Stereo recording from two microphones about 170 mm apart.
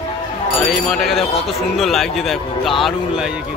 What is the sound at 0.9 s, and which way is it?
A man's voice, centre (ahead or behind).